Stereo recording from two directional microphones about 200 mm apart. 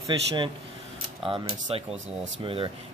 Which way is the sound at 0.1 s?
20° right (ahead or behind).